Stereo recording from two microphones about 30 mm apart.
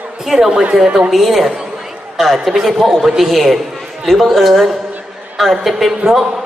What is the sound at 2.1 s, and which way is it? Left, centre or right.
Speech, centre.